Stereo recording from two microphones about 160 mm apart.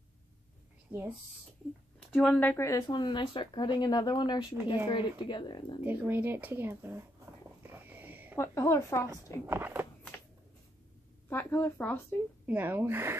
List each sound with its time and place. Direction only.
0.9 s speech: 10° right (ahead or behind)
2.1 s speech: 5° left (ahead or behind)
2.5 s speech: 20° left (ahead or behind)
5.9 s speech: 10° right (ahead or behind)
7.7 s a sound: 10° right (ahead or behind)
8.4 s speech: 15° left (ahead or behind)
9.1 s speech: 15° right (ahead or behind)
11.2 s a woman's voice: 15° left (ahead or behind)
12.4 s speech: 10° right (ahead or behind)